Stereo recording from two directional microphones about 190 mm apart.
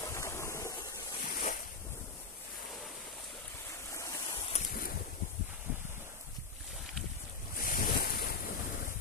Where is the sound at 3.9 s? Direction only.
15° left (ahead or behind).